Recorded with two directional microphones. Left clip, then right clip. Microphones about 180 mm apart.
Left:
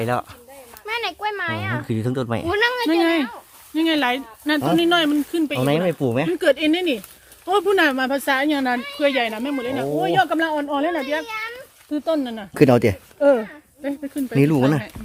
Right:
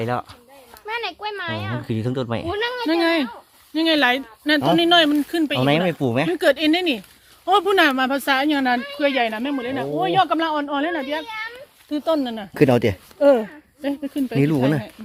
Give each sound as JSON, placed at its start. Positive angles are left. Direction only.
{"t": 0.0, "sound": "speech", "side_deg": 0}
{"t": 2.8, "sound": "speech", "side_deg": -50}
{"t": 5.5, "sound": "speech", "side_deg": -15}
{"t": 6.3, "sound": "speech", "side_deg": -55}
{"t": 10.9, "sound": "speech", "side_deg": -40}
{"t": 12.5, "sound": "speech", "side_deg": 5}
{"t": 13.1, "sound": "speech", "side_deg": -40}
{"t": 14.3, "sound": "speech", "side_deg": 5}